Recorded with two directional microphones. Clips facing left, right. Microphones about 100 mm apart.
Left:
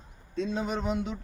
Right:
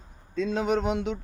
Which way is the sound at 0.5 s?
80° right.